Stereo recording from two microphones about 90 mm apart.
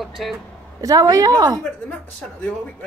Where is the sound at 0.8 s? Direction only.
40° right (ahead or behind).